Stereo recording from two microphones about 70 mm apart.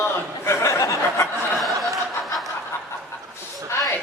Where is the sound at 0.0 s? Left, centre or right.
Left.